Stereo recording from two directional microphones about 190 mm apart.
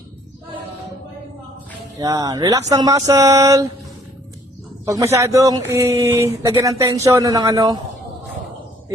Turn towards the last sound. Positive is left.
turn(degrees=-20)  # may be behind; listen again after turning